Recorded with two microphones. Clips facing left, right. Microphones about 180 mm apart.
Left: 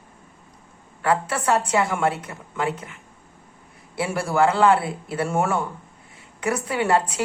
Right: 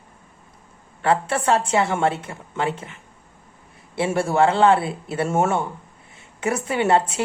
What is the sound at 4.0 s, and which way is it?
A woman's voice, 25° right (ahead or behind).